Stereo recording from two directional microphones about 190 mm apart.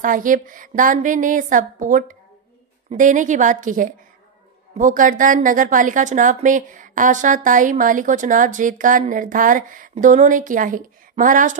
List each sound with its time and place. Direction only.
0.0 s a woman's voice: 45° right (ahead or behind)